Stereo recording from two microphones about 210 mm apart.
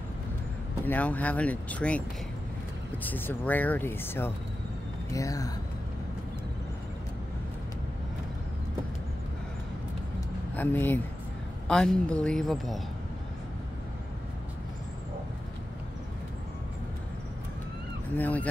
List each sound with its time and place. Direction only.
0.8 s speech: 10° left (ahead or behind)
10.5 s speech: 10° left (ahead or behind)
18.1 s speech: 5° left (ahead or behind)